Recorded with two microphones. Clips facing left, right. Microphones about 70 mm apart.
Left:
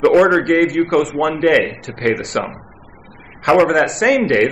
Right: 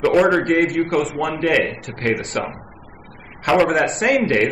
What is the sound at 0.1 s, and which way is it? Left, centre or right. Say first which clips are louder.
Speech: left 4 dB; centre.